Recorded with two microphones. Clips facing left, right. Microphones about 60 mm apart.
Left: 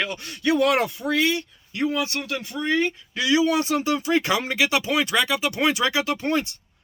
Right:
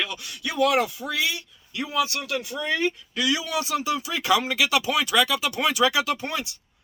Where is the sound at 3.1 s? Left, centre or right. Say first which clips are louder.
Left 5 dB; left.